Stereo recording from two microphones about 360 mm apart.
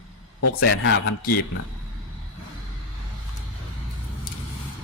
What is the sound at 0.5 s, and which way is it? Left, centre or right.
Speech, left.